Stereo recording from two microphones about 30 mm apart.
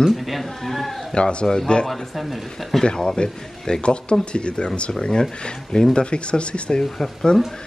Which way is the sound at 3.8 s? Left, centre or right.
Left.